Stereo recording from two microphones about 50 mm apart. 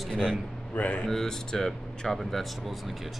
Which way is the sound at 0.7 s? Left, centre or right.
Left.